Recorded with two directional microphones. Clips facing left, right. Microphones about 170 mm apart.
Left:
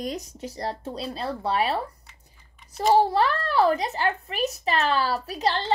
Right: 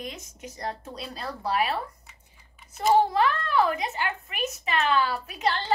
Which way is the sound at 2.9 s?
35° left (ahead or behind).